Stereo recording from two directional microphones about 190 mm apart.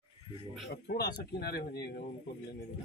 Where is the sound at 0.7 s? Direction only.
55° left (ahead or behind).